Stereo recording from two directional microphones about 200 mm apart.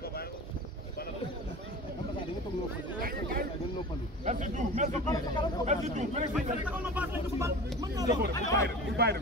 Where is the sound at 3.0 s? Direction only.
45° right (ahead or behind).